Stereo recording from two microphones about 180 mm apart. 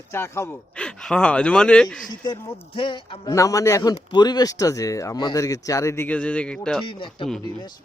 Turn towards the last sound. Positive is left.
turn(degrees=30)  # may be behind; listen again after turning